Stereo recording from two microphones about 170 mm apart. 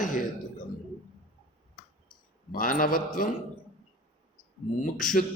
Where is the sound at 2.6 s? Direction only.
55° left (ahead or behind).